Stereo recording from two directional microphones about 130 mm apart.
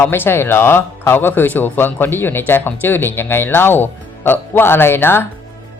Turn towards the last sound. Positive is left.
turn(degrees=15)  # may be behind; listen again after turning